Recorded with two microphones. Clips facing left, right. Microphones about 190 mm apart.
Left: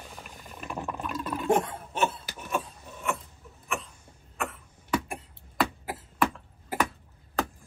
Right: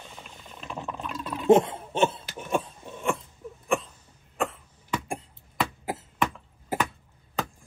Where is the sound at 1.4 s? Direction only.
25° right (ahead or behind).